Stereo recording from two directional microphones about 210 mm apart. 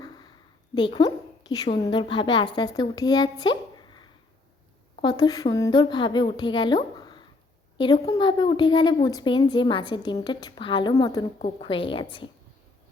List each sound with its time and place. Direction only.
0.7 s a woman's voice: 20° left (ahead or behind)
11.3 s a woman's voice: 30° left (ahead or behind)